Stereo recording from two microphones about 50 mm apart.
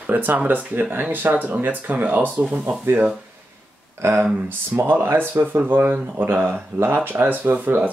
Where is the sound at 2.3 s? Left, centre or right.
Right.